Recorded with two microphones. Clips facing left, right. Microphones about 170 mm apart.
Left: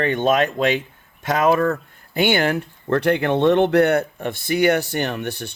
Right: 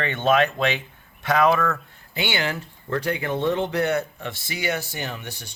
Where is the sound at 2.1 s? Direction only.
50° left (ahead or behind).